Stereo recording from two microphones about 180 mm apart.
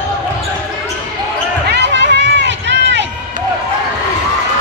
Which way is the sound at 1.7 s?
75° right (ahead or behind).